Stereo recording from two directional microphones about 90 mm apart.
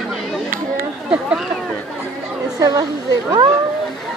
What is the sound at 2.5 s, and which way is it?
Speech, 45° right (ahead or behind).